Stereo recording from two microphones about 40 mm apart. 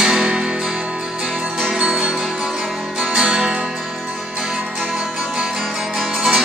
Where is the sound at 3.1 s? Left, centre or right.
Centre.